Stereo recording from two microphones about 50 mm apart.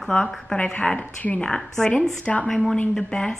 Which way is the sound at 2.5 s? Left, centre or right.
Centre.